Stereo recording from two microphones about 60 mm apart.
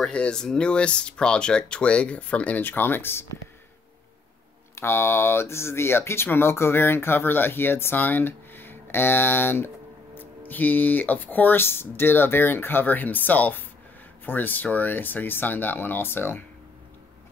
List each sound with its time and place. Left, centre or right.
0.1 s speech: centre
2.6 s speech: left
4.7 s speech: left